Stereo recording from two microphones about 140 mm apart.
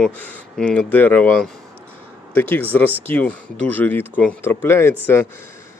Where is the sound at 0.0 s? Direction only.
5° left (ahead or behind).